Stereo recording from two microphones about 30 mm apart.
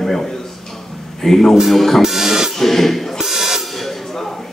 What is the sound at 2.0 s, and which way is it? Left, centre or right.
Music, centre.